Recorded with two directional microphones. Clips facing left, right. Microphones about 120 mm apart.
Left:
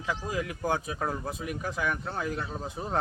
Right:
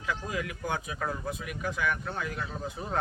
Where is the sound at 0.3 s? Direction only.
30° left (ahead or behind).